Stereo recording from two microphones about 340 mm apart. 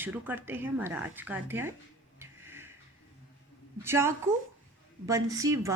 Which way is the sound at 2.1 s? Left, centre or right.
Centre.